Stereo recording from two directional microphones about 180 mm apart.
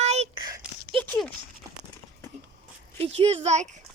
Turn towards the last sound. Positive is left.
turn(degrees=-35)  # may be behind; listen again after turning